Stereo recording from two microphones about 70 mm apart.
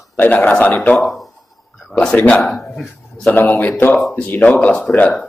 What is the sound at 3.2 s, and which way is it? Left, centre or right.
A man's voice, left.